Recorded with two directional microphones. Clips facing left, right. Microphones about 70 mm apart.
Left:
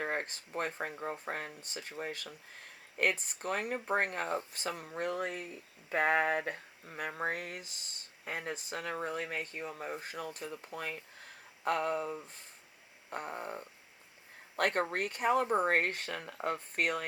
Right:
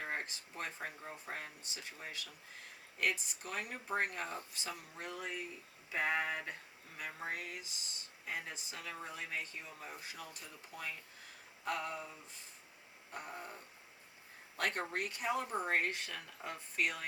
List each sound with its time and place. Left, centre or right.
0.0 s speech: left